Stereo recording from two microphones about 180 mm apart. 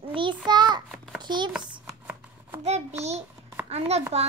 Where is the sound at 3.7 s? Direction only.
35° right (ahead or behind).